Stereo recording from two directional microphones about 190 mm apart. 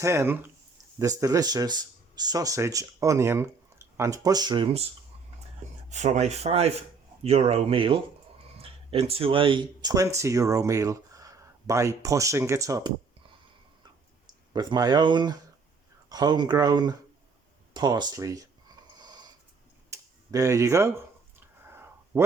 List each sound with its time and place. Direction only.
0.0 s speech: 15° right (ahead or behind); by 4.9 s 30° right (ahead or behind)
5.9 s speech: 40° right (ahead or behind); by 18.4 s 15° right (ahead or behind)
18.9 s dog: 20° right (ahead or behind)
19.9 s a sound: 15° right (ahead or behind)